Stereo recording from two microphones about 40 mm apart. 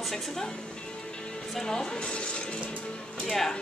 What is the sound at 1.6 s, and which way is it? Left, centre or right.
Speech, centre.